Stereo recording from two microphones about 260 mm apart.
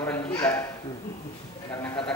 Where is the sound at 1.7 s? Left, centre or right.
Centre.